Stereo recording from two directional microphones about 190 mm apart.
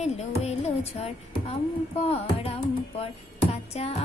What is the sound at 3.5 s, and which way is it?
Music, 35° left (ahead or behind).